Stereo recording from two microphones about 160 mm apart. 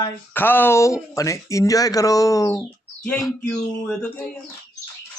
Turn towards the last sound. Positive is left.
turn(degrees=5)  # may be behind; listen again after turning